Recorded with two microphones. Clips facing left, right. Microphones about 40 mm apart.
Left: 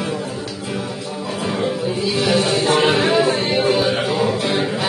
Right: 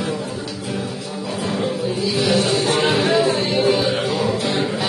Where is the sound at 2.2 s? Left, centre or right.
Left.